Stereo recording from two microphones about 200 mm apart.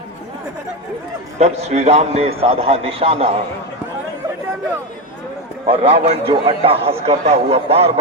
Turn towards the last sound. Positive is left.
turn(degrees=-30)  # may be behind; listen again after turning